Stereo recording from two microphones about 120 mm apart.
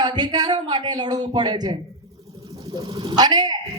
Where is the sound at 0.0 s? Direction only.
35° right (ahead or behind).